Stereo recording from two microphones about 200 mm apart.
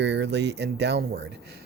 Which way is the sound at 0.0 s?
60° right (ahead or behind).